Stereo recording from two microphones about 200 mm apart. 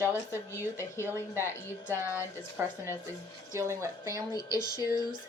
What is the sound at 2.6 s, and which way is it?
A woman's voice, 10° right (ahead or behind).